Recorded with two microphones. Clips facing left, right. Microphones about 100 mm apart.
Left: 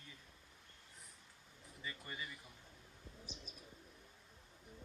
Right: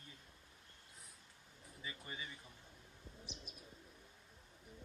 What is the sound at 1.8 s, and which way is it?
Speech, 10° right (ahead or behind).